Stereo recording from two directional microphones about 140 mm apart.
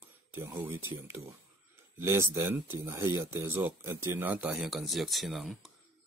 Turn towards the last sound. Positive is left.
turn(degrees=0)  # may be behind; listen again after turning